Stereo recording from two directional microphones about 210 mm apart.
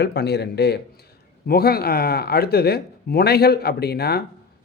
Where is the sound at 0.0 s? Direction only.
50° left (ahead or behind).